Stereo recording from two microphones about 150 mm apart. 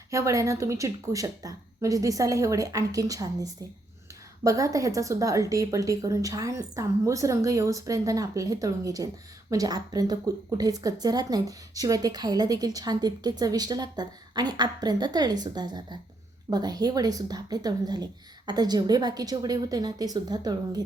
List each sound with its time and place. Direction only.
0.1 s a woman's voice: 20° right (ahead or behind)